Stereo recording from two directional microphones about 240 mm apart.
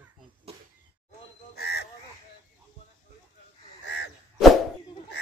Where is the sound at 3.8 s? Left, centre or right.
Left.